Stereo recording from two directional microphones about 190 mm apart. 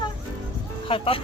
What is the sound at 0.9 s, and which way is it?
Speech, 30° left (ahead or behind).